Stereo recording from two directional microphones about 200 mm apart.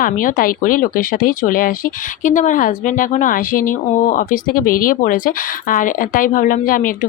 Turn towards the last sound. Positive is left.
turn(degrees=45)  # may be behind; listen again after turning